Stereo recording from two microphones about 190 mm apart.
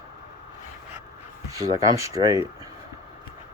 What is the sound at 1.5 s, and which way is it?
Speech, 15° right (ahead or behind).